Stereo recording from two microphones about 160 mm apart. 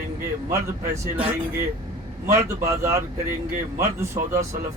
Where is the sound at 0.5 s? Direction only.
20° right (ahead or behind).